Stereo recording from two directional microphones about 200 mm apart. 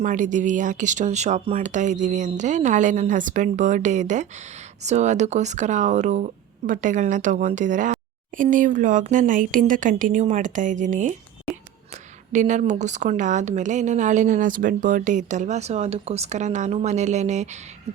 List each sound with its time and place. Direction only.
0.0 s a woman's voice: 40° right (ahead or behind)
12.3 s a woman's voice: 35° right (ahead or behind)